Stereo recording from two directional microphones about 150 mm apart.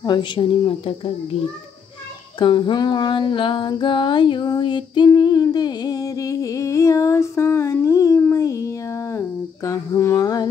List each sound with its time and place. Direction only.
0.0 s speech: 30° left (ahead or behind)
2.3 s female singing: 30° left (ahead or behind)